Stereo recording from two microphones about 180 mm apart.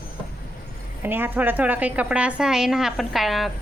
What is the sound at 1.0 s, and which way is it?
A woman's voice, 10° right (ahead or behind).